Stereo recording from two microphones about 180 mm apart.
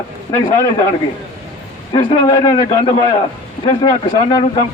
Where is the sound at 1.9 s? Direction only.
25° left (ahead or behind).